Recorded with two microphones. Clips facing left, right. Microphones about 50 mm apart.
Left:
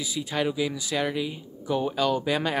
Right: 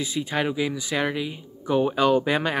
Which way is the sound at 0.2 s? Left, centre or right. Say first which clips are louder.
Right 1 dB; centre.